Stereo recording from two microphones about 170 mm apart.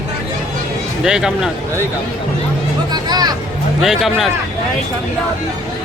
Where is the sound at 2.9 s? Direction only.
25° right (ahead or behind).